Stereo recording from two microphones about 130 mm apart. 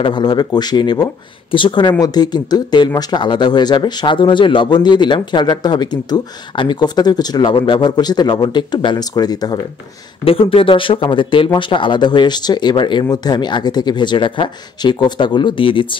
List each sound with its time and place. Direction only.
0.0 s speech: 35° left (ahead or behind)
10.2 s speech: 45° left (ahead or behind)